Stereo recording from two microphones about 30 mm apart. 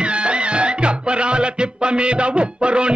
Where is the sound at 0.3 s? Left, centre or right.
Right.